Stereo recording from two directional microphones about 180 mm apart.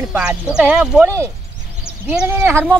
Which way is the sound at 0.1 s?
5° right (ahead or behind).